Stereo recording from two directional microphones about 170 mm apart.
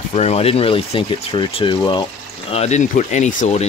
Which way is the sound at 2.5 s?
40° left (ahead or behind).